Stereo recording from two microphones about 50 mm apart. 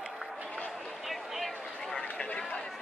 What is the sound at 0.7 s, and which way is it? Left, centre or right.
Run, centre.